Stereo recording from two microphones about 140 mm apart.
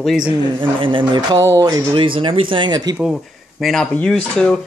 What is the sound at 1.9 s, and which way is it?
Speech, 40° right (ahead or behind).